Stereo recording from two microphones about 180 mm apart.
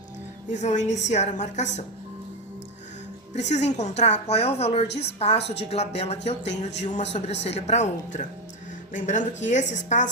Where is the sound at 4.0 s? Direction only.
40° left (ahead or behind).